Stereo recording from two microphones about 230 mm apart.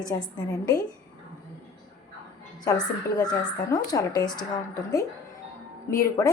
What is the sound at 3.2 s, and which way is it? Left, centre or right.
Speech, centre.